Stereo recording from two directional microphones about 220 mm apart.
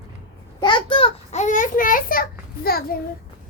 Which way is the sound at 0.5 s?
20° left (ahead or behind).